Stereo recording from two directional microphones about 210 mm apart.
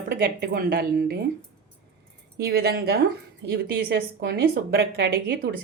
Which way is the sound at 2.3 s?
50° right (ahead or behind).